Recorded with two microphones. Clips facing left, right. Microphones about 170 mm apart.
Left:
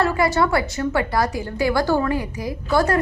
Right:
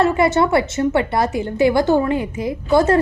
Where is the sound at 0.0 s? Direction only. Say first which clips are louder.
Right 4 dB; 25° right (ahead or behind).